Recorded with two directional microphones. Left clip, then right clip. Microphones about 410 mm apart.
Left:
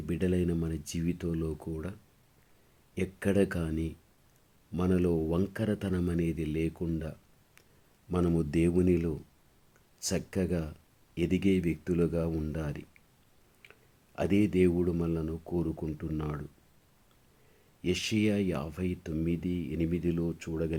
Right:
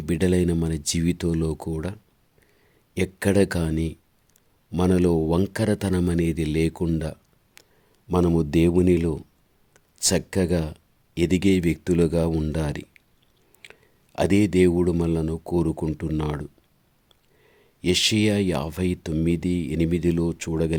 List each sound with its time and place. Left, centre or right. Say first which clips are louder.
0.0 s speech: right 9 dB; right
14.2 s speech: right 8 dB; right
17.8 s speech: right 9 dB; right